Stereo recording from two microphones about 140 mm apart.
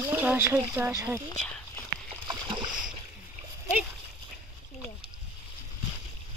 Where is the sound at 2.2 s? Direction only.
35° right (ahead or behind).